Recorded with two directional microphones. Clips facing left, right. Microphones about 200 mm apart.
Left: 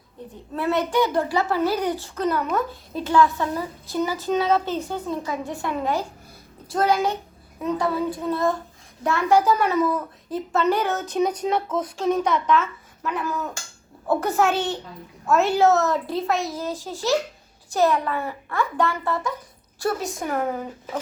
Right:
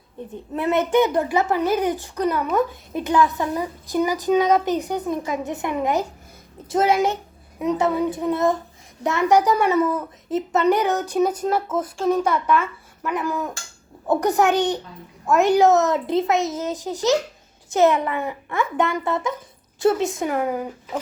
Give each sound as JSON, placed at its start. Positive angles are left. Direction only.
{"t": 0.5, "sound": "a child's voice", "side_deg": -20}
{"t": 20.3, "sound": "a child's voice", "side_deg": -10}